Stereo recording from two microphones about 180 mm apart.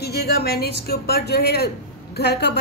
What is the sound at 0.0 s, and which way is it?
A woman's voice, 65° left (ahead or behind).